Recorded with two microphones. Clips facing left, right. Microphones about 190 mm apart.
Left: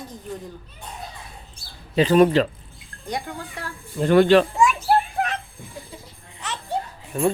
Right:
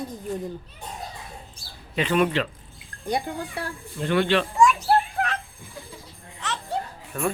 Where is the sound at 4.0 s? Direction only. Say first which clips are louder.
Left 7 dB; 40° left (ahead or behind).